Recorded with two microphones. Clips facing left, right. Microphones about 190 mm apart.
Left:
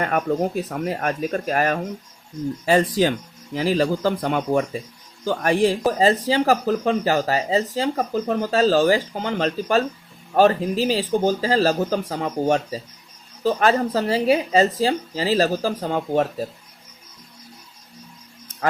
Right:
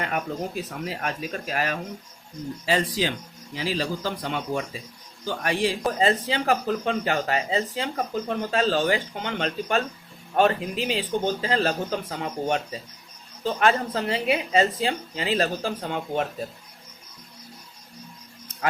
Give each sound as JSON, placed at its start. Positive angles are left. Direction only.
{"t": 0.0, "sound": "speech", "side_deg": 50}